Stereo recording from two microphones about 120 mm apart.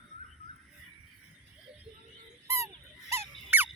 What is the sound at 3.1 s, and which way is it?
Squeak, 20° right (ahead or behind).